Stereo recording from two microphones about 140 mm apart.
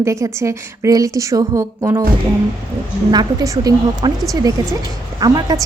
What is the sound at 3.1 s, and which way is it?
A woman's voice, 25° right (ahead or behind).